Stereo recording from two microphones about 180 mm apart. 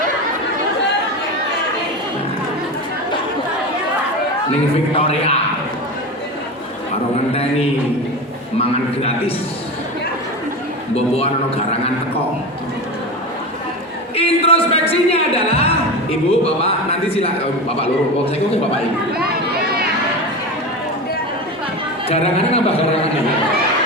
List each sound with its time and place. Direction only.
4.9 s a man's voice: 35° left (ahead or behind)
8.5 s a man's voice: 35° left (ahead or behind)
10.9 s a man's voice: 35° left (ahead or behind)
14.2 s music: 35° left (ahead or behind)
16.3 s a man's voice: 35° left (ahead or behind)
22.1 s a man's voice: 35° left (ahead or behind)